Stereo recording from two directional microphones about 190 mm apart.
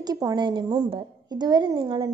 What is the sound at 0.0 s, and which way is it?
A woman's voice, 20° right (ahead or behind).